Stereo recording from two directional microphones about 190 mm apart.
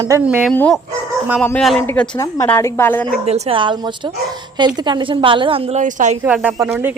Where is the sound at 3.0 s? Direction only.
30° right (ahead or behind).